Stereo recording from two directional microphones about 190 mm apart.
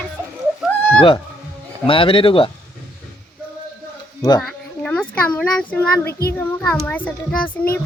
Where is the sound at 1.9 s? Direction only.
30° left (ahead or behind).